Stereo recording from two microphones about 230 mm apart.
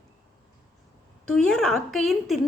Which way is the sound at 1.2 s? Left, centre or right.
Centre.